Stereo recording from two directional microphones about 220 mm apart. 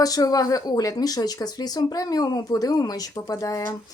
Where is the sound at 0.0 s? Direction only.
15° left (ahead or behind).